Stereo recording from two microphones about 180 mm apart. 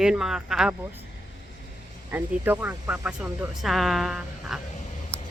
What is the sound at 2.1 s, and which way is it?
Speech, 10° right (ahead or behind).